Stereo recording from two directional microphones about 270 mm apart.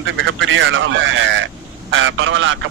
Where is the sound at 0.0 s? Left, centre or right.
Right.